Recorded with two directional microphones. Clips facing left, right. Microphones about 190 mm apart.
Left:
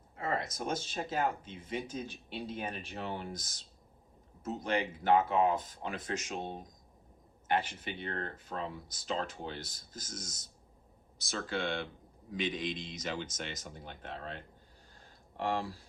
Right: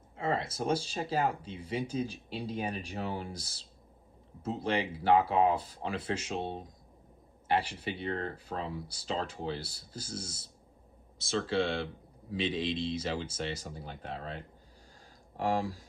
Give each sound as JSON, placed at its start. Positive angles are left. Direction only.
{"t": 0.2, "sound": "speech", "side_deg": -30}